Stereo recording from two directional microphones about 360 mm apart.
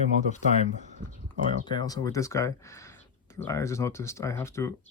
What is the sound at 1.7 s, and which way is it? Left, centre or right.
Speech, centre.